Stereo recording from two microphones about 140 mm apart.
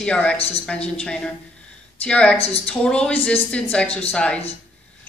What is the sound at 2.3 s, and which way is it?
Speech, 45° left (ahead or behind).